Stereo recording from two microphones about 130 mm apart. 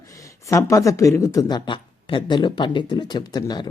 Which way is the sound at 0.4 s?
25° left (ahead or behind).